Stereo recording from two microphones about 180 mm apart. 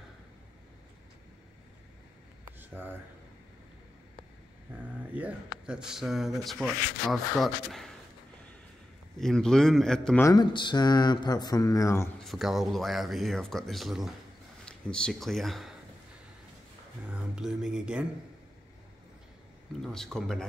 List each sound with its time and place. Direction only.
2.7 s speech: 10° right (ahead or behind)
5.1 s speech: 5° right (ahead or behind)
9.2 s speech: 5° left (ahead or behind)
10.2 s speech: 25° left (ahead or behind)
12.2 s speech: centre (ahead or behind)
17.0 s speech: 5° right (ahead or behind)
19.8 s speech: centre (ahead or behind)